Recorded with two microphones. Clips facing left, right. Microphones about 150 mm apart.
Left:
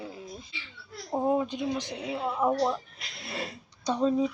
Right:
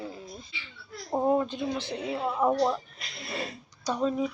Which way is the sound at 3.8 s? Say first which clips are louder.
Left 2 dB; 30° left (ahead or behind).